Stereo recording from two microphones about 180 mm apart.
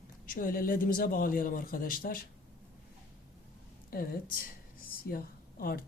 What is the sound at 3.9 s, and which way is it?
A woman's voice, 55° left (ahead or behind).